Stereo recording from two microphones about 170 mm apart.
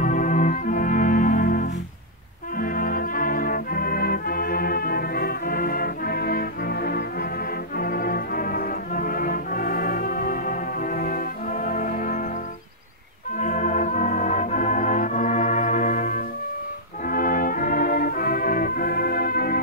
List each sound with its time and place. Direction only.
0.0 s music: 50° left (ahead or behind)
13.4 s music: 45° left (ahead or behind)
17.0 s brass instrument: 55° left (ahead or behind)